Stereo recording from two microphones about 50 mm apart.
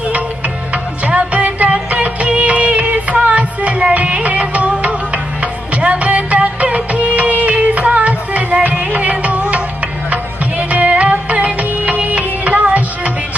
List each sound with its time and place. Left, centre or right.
1.0 s music: right
10.7 s music: right